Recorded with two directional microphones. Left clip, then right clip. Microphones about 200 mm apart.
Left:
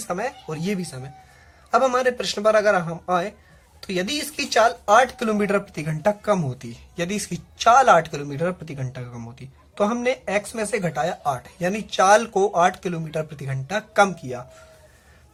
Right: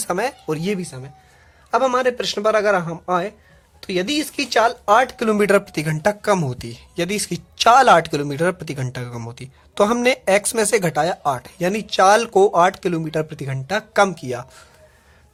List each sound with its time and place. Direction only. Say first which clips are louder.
0.1 s a man's voice: right 5 dB; 45° right (ahead or behind)